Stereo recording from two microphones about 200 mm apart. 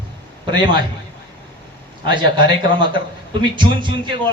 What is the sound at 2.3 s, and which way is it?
Speech, 25° right (ahead or behind).